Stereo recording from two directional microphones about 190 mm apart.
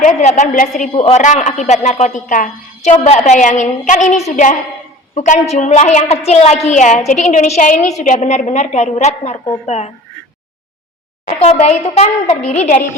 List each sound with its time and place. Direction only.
0.0 s a woman's voice: 40° left (ahead or behind)
11.6 s a woman's voice: 35° left (ahead or behind)